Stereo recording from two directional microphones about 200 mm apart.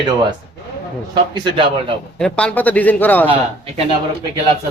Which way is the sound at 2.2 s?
5° left (ahead or behind).